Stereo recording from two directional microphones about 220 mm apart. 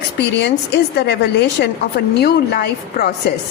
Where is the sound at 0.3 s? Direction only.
50° left (ahead or behind).